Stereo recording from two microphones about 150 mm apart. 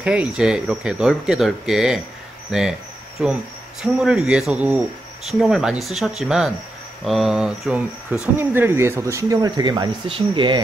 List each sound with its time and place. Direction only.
0.0 s speech: 5° right (ahead or behind); by 10.6 s 35° right (ahead or behind)